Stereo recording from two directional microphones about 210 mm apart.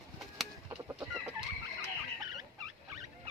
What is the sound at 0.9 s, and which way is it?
Chicken, 10° right (ahead or behind).